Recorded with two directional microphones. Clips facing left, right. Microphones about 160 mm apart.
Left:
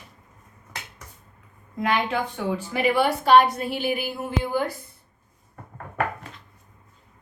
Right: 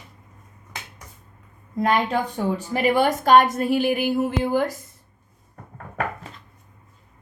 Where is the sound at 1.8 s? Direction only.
40° right (ahead or behind).